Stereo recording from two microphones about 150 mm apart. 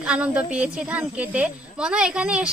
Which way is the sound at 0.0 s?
5° right (ahead or behind).